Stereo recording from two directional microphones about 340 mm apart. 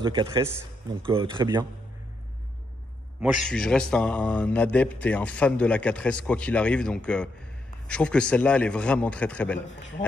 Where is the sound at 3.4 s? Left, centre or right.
Centre.